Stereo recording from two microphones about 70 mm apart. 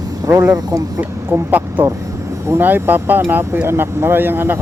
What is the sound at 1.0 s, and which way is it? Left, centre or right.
Speech, right.